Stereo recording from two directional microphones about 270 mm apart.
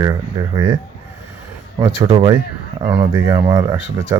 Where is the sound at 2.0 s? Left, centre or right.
Centre.